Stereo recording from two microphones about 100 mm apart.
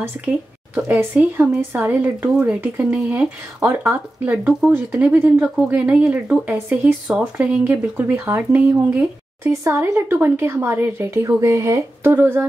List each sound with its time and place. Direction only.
0.7 s speech: 15° right (ahead or behind)